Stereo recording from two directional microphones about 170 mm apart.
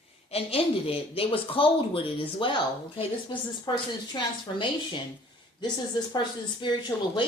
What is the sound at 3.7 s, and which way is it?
Speech, 30° left (ahead or behind).